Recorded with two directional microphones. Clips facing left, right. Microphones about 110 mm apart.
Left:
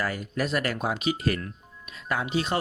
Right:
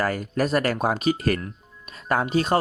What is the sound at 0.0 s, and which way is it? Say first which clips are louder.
Speech: right 5 dB; 45° right (ahead or behind).